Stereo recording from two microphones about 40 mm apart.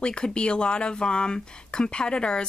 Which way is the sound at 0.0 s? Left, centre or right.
Left.